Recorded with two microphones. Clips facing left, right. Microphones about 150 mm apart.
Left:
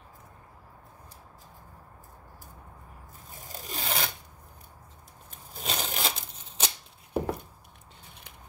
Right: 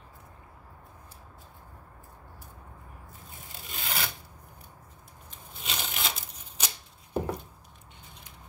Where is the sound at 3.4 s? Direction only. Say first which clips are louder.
Left 5 dB; 40° left (ahead or behind).